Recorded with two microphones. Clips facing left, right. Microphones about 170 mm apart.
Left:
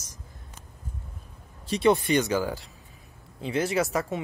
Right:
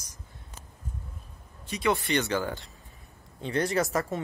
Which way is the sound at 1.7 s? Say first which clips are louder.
Left 6 dB; 25° left (ahead or behind).